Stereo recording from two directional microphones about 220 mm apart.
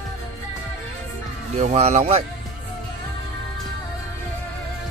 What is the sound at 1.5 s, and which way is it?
Speech, 30° right (ahead or behind).